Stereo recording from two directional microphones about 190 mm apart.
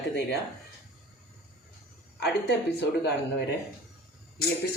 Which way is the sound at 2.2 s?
60° left (ahead or behind).